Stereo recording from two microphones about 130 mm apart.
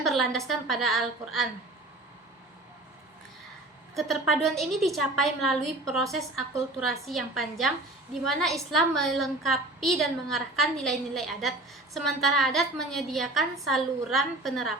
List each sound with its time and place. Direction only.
0.0 s a woman's voice: centre (ahead or behind)
3.9 s a woman's voice: centre (ahead or behind)